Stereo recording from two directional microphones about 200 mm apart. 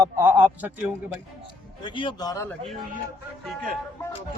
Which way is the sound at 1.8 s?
25° left (ahead or behind).